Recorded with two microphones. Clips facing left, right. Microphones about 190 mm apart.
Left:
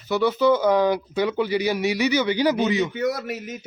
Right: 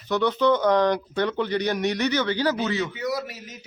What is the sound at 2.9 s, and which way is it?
Speech, 55° left (ahead or behind).